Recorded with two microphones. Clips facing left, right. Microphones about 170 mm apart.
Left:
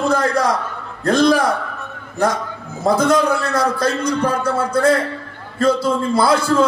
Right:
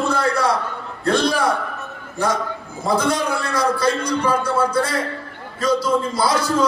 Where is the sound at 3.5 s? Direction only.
50° left (ahead or behind).